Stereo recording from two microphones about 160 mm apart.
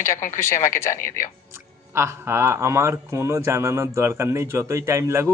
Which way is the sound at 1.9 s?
15° right (ahead or behind).